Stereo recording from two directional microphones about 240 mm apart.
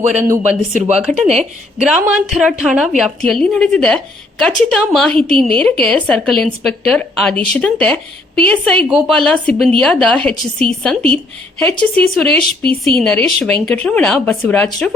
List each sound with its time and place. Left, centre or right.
0.1 s speech: centre
0.7 s speech: right
0.9 s a woman's voice: centre